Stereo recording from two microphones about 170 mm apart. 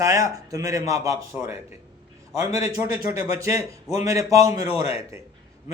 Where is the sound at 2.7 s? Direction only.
15° right (ahead or behind).